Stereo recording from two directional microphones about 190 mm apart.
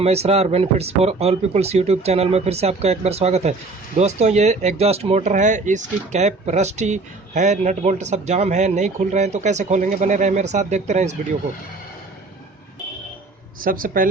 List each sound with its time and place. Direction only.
0.0 s speech: 35° right (ahead or behind)
13.6 s speech: 45° right (ahead or behind)